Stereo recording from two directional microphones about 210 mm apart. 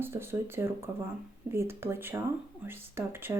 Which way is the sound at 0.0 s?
10° right (ahead or behind).